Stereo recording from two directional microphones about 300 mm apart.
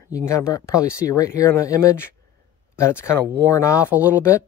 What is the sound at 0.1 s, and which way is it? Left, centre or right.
Speech, centre.